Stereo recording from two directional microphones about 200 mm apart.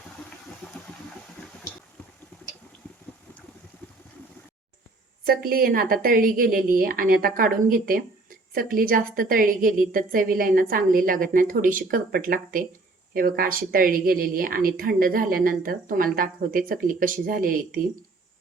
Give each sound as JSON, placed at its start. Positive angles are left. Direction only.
{"t": 5.2, "sound": "a woman's voice", "side_deg": -50}